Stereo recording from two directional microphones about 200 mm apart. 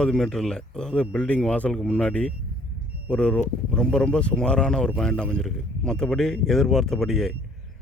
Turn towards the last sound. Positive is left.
turn(degrees=0)  # may be behind; listen again after turning